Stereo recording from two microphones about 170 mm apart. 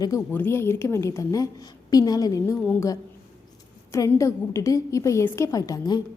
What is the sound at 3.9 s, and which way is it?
A woman's voice, 15° left (ahead or behind).